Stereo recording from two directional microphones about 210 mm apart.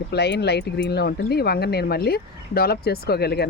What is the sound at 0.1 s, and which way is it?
Speech, 50° left (ahead or behind).